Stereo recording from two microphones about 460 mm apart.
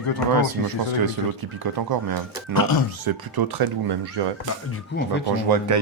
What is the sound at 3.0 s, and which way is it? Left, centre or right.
Speech, right.